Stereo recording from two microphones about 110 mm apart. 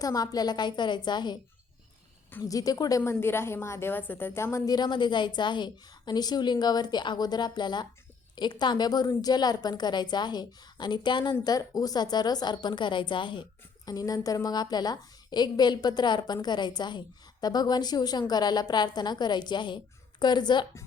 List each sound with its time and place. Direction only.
0.0 s a woman's voice: 35° left (ahead or behind)
2.4 s a woman's voice: 35° left (ahead or behind)
3.0 s a woman's voice: 20° left (ahead or behind); by 20.7 s 45° left (ahead or behind)